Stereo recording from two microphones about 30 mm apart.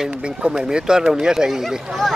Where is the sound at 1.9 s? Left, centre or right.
Centre.